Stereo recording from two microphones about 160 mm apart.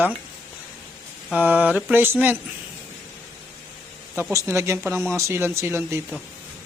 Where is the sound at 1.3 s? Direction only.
10° right (ahead or behind).